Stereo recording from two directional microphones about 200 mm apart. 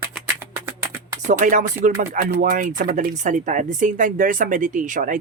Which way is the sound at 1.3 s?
40° right (ahead or behind).